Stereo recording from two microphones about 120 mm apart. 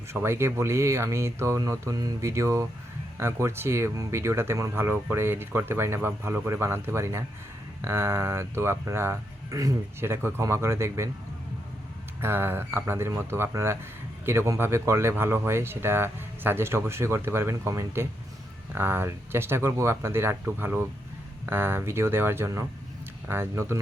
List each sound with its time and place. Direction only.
0.1 s speech: 20° right (ahead or behind)
12.2 s speech: 20° right (ahead or behind)